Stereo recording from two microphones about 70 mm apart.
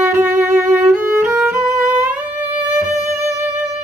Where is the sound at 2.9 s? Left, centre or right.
Right.